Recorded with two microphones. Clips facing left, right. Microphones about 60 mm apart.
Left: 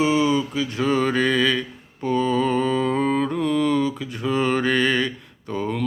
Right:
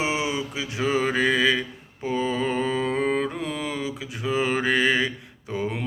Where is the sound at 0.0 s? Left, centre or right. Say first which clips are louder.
Left 7 dB; centre.